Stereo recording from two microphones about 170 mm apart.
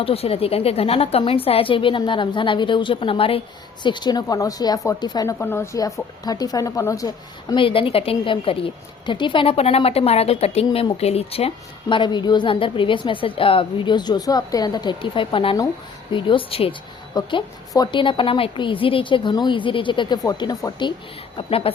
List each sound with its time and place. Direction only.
0.0 s a woman's voice: 35° left (ahead or behind)
7.5 s a woman's voice: 30° left (ahead or behind)